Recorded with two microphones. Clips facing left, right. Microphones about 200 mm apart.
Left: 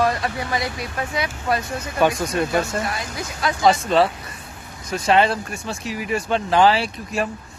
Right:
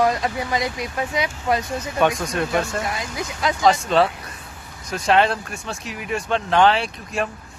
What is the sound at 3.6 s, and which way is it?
Speech, centre (ahead or behind).